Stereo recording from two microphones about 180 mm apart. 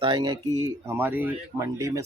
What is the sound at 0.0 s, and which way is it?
Speech, 25° right (ahead or behind).